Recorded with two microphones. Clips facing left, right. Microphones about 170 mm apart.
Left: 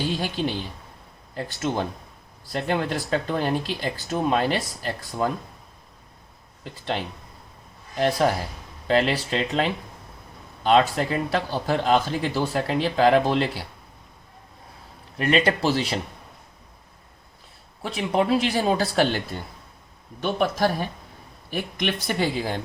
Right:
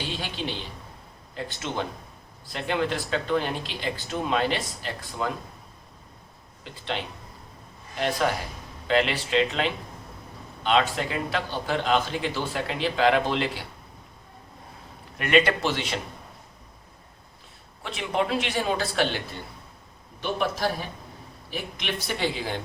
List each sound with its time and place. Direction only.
0.2 s a man's voice: 45° left (ahead or behind)
6.9 s a man's voice: 40° left (ahead or behind)
15.2 s a man's voice: 35° left (ahead or behind)
17.8 s a man's voice: 40° left (ahead or behind)
20.2 s speech: 50° left (ahead or behind)